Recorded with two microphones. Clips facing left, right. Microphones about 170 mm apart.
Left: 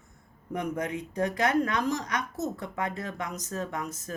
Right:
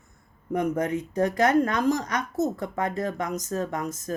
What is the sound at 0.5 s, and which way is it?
Speech, 45° right (ahead or behind).